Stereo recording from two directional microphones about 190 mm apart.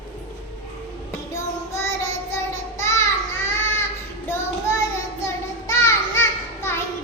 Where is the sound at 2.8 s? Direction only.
15° left (ahead or behind).